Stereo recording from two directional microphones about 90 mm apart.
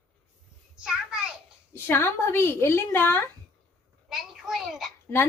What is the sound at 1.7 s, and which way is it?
A woman's voice, 25° left (ahead or behind).